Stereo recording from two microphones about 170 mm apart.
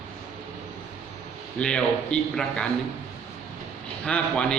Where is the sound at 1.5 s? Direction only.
5° left (ahead or behind).